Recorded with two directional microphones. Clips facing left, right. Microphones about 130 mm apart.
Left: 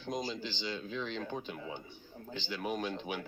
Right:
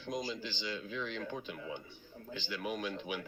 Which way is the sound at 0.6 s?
25° left (ahead or behind).